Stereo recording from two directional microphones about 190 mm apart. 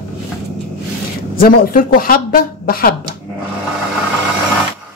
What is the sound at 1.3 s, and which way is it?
Speech, 50° left (ahead or behind).